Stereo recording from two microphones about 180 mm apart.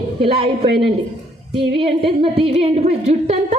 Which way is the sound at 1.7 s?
30° right (ahead or behind).